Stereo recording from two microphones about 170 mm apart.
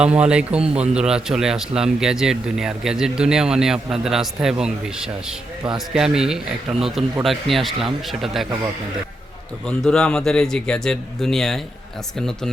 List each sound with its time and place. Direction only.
0.0 s speech: 5° right (ahead or behind)
0.6 s speech: 35° right (ahead or behind)
0.9 s a man's voice: 5° right (ahead or behind)
9.6 s a man's voice: 5° left (ahead or behind)